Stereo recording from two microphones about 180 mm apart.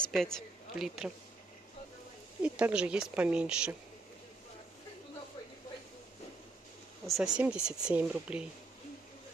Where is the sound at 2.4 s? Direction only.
5° right (ahead or behind).